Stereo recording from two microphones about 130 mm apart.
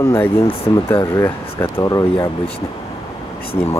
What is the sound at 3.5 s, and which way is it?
Speech, 20° left (ahead or behind).